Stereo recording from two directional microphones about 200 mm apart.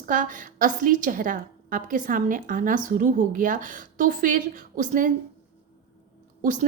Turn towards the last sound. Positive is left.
turn(degrees=-40)  # may be behind; listen again after turning